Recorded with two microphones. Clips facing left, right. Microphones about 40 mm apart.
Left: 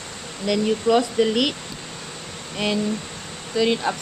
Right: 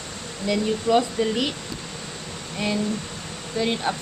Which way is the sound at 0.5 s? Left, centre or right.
Left.